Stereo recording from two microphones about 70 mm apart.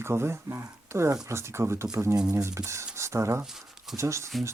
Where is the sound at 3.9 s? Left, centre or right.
Right.